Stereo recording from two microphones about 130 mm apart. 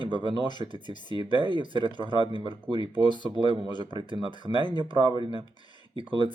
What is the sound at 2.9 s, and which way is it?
Speech, 35° left (ahead or behind).